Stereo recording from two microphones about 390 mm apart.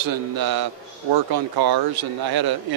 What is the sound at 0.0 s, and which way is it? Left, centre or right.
Speech, right.